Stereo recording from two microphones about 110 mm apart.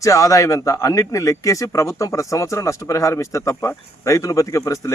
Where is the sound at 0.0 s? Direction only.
30° left (ahead or behind).